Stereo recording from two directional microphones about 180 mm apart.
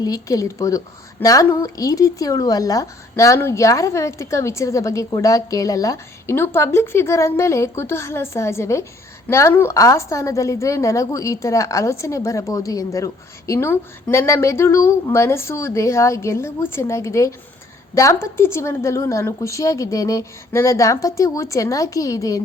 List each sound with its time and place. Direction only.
0.0 s a woman's voice: 20° left (ahead or behind)